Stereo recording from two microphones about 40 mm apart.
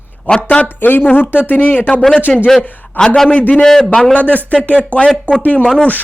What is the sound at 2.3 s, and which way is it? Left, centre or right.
Speech, centre.